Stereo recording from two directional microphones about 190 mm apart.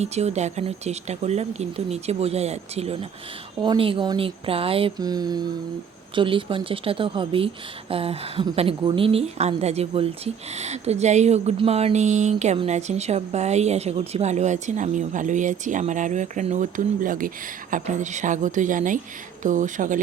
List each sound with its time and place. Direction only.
0.0 s a woman's voice: 35° right (ahead or behind)